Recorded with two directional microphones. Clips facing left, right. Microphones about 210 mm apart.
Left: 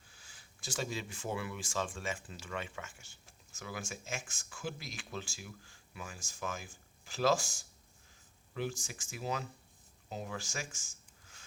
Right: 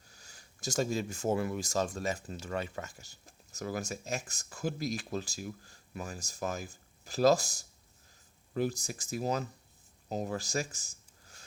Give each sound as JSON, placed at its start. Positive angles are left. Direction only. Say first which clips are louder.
{"t": 0.1, "sound": "speech", "louder": "right 5 dB", "side_deg": -40}